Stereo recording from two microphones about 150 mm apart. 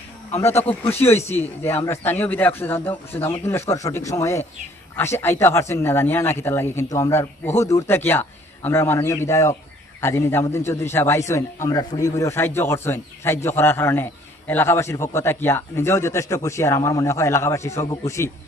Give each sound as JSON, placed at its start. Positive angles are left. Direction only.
{"t": 1.4, "sound": "a man's voice", "side_deg": 15}